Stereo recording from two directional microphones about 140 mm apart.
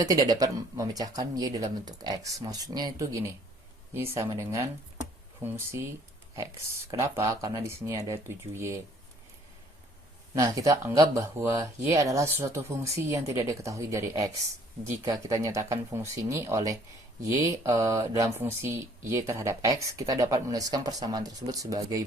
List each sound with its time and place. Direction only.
0.0 s speech: 25° right (ahead or behind)
7.0 s speech: 20° right (ahead or behind)
10.3 s speech: 25° right (ahead or behind)